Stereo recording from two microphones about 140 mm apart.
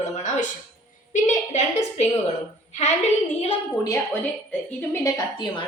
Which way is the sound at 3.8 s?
25° left (ahead or behind).